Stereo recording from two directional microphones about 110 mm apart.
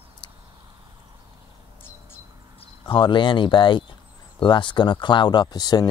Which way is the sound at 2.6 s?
50° left (ahead or behind).